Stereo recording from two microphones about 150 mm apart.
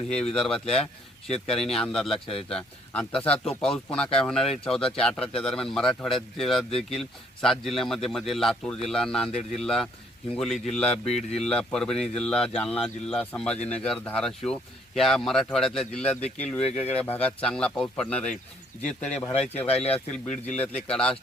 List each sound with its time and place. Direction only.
0.3 s speech: 5° left (ahead or behind)
11.0 s speech: 45° left (ahead or behind)
11.3 s speech: 5° left (ahead or behind)